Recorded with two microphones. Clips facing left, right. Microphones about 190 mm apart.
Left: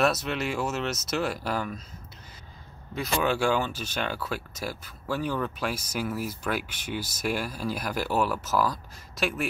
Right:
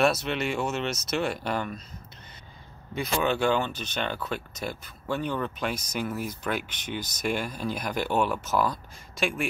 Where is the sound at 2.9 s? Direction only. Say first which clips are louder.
Even; 5° left (ahead or behind).